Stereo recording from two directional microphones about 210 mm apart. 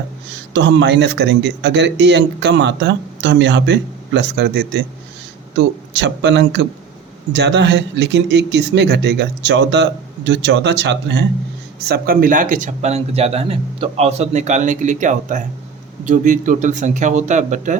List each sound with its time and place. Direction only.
0.5 s a man's voice: 60° right (ahead or behind)
11.9 s a man's voice: 40° right (ahead or behind)